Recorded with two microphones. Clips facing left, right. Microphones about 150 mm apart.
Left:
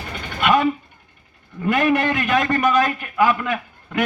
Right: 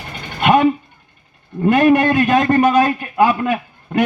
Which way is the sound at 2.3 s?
25° right (ahead or behind).